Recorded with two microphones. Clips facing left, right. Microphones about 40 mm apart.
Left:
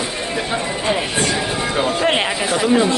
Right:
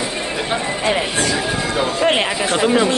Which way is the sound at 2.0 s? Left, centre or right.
Centre.